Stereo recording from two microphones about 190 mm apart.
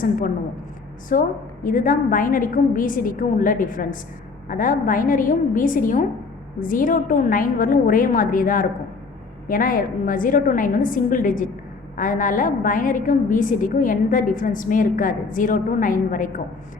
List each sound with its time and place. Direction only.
1.1 s a woman's voice: 45° left (ahead or behind)